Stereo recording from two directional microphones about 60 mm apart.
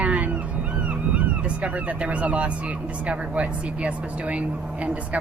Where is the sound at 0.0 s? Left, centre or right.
Right.